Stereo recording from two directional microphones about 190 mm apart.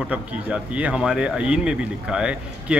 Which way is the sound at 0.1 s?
5° right (ahead or behind).